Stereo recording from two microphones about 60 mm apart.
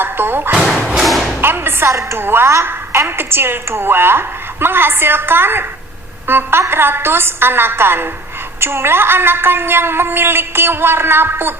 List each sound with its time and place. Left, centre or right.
0.0 s a sound: right
1.0 s thump: centre
1.4 s music: right
1.9 s a woman's voice: right
2.1 s a woman's voice: right